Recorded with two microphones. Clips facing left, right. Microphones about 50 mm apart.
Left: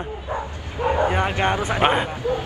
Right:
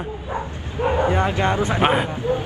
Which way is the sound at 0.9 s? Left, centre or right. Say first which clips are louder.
Right 1 dB; left.